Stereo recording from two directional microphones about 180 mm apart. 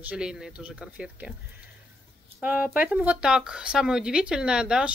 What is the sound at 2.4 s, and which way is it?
Speech, 10° right (ahead or behind).